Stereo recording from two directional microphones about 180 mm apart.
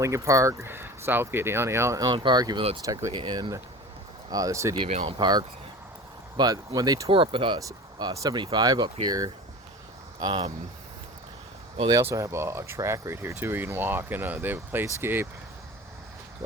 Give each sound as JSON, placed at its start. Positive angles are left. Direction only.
{"t": 0.0, "sound": "speech", "side_deg": -15}
{"t": 4.8, "sound": "speech", "side_deg": -35}
{"t": 11.8, "sound": "speech", "side_deg": -20}